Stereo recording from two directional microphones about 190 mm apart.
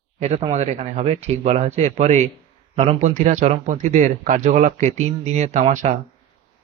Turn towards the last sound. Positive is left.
turn(degrees=-40)  # may be behind; listen again after turning